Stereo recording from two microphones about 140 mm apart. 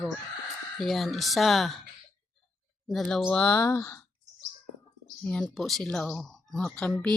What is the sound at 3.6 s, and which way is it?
Speech, 20° left (ahead or behind).